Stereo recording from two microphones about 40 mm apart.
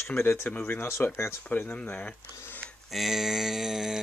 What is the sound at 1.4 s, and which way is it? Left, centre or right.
Speech, left.